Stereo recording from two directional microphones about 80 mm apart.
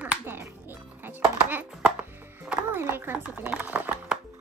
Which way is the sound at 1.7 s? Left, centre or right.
Centre.